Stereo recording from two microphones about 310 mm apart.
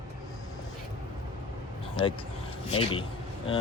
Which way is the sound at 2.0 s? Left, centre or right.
Centre.